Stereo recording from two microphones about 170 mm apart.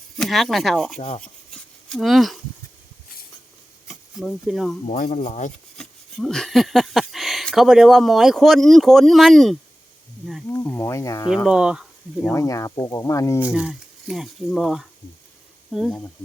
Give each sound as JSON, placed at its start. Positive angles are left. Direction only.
{"t": 0.2, "sound": "speech", "side_deg": 0}
{"t": 0.9, "sound": "speech", "side_deg": 40}
{"t": 1.2, "sound": "a sound", "side_deg": 5}
{"t": 3.8, "sound": "speech", "side_deg": 0}
{"t": 4.9, "sound": "speech", "side_deg": 50}
{"t": 5.7, "sound": "speech", "side_deg": 5}
{"t": 10.5, "sound": "speech", "side_deg": 10}
{"t": 11.4, "sound": "speech", "side_deg": -5}
{"t": 12.3, "sound": "speech", "side_deg": 20}
{"t": 13.4, "sound": "speech", "side_deg": -5}